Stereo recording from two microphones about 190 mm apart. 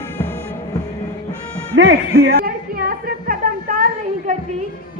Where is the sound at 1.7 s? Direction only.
80° right.